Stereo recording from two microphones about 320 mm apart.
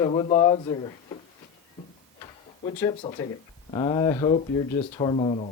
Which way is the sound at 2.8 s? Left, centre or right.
Centre.